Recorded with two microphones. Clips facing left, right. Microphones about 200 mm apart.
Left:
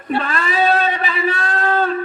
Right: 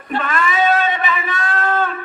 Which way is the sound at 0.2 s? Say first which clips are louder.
Right 2 dB; 35° left (ahead or behind).